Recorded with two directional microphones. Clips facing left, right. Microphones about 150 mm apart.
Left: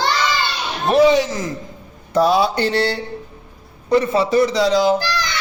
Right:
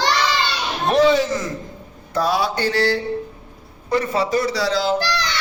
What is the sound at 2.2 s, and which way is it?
A man's voice, 20° left (ahead or behind).